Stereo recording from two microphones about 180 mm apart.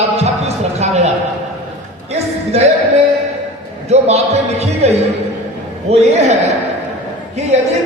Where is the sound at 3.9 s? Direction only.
35° right (ahead or behind).